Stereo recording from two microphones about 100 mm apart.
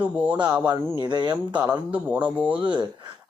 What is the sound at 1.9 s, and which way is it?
Speech, 15° right (ahead or behind).